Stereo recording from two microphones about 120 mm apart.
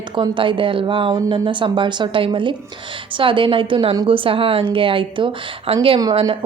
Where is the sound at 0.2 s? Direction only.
45° right (ahead or behind).